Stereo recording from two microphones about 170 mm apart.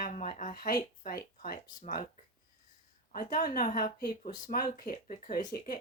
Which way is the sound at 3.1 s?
50° left (ahead or behind).